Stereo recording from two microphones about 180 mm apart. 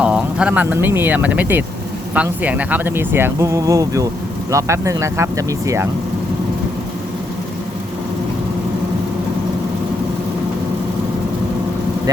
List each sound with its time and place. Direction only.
0.0 s speech: 5° right (ahead or behind)